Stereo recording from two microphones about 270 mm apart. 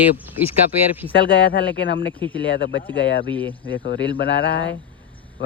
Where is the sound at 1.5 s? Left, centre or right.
Left.